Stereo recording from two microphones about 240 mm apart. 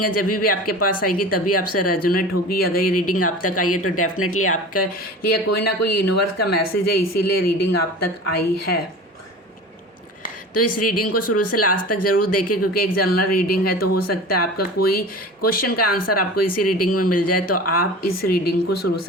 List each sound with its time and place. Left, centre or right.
0.0 s speech: left
2.8 s speech: left
4.7 s a woman's voice: left
10.5 s speech: left
13.0 s a woman's voice: left